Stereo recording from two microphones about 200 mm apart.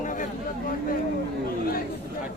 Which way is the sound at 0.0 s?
40° left (ahead or behind).